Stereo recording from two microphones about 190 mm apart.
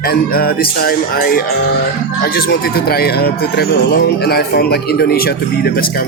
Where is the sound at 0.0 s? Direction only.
50° left (ahead or behind).